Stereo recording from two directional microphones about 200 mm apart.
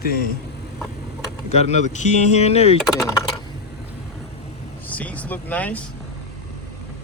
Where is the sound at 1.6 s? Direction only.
35° left (ahead or behind).